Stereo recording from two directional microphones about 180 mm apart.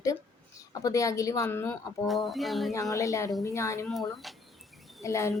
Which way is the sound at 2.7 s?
20° left (ahead or behind).